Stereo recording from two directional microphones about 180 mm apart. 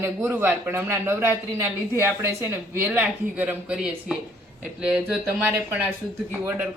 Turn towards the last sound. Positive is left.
turn(degrees=-10)  # may be behind; listen again after turning